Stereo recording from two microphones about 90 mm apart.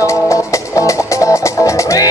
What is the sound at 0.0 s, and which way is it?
Music, 35° left (ahead or behind).